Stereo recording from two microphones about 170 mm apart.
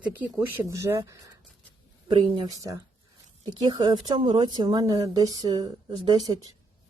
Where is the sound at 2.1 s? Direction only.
30° right (ahead or behind).